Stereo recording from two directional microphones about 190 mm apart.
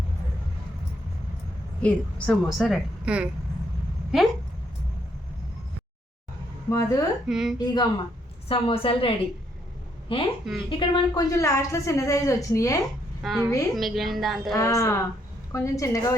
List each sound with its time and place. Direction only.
1.8 s a woman's voice: 5° left (ahead or behind)
6.7 s a woman's voice: 15° left (ahead or behind)
7.3 s a woman's voice: centre (ahead or behind)
7.6 s a woman's voice: 20° left (ahead or behind)
13.2 s a woman's voice: centre (ahead or behind)
14.5 s a woman's voice: 15° left (ahead or behind)